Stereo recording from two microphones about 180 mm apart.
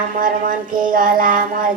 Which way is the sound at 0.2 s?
50° right (ahead or behind).